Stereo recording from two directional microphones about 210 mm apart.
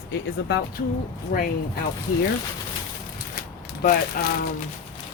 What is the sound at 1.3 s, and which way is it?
Speech, 40° left (ahead or behind).